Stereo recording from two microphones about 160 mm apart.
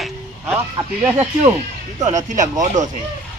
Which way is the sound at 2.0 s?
50° right (ahead or behind).